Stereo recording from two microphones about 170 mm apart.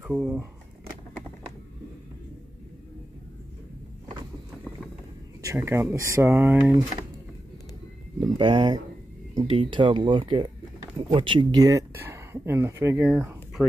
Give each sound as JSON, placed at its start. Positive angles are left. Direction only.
{"t": 0.0, "sound": "speech", "side_deg": -5}
{"t": 5.4, "sound": "speech", "side_deg": -15}
{"t": 8.2, "sound": "speech", "side_deg": -30}